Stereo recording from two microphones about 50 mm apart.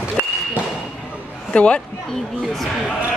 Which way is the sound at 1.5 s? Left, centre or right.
Left.